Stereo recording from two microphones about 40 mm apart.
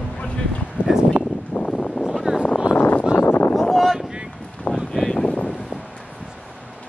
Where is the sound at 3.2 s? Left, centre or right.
Left.